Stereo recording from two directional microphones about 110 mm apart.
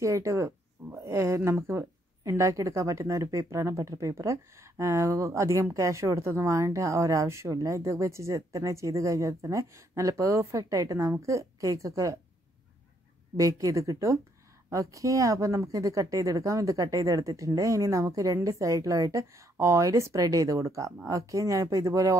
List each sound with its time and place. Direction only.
0.0 s speech: 30° right (ahead or behind)
13.4 s speech: 30° right (ahead or behind)